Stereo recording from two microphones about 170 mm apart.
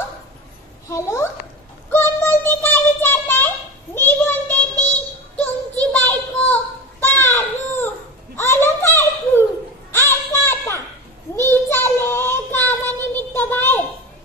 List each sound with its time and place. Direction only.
0.8 s a child's voice: 15° left (ahead or behind)
1.9 s child singing: 15° left (ahead or behind)
8.4 s a sound: 15° left (ahead or behind)
9.9 s music: 15° left (ahead or behind)
11.3 s child singing: 15° left (ahead or behind)